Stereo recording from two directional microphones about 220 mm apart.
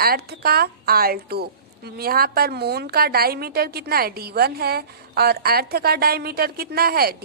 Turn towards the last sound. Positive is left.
turn(degrees=-45)  # may be behind; listen again after turning